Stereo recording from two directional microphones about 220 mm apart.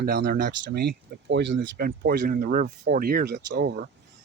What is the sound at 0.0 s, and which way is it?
Speech, 45° right (ahead or behind).